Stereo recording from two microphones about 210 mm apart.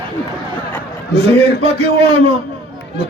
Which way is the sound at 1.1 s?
50° left (ahead or behind).